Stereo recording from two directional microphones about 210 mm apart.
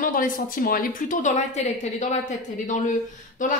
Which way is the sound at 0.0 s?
40° left (ahead or behind).